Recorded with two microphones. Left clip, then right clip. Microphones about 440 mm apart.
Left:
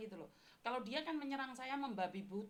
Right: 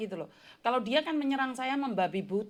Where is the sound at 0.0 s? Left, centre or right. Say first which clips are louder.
Right 14 dB; right.